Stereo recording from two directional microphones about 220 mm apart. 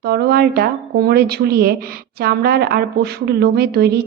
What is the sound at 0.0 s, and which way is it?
Speech, 45° right (ahead or behind).